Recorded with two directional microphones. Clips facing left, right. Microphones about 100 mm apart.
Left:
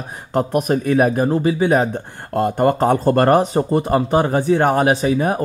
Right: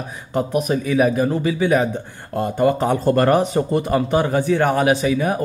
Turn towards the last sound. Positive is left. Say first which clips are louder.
# left 1 dB
turn(degrees=40)  # may be behind; listen again after turning